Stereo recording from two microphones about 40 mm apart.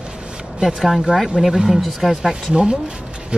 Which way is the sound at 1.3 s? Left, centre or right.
Centre.